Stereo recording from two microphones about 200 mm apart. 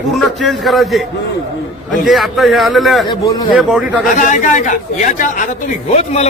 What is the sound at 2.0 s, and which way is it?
A man's voice, centre (ahead or behind).